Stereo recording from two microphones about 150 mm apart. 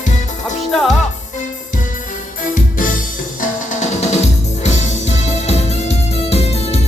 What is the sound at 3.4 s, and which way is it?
Music, 50° left (ahead or behind).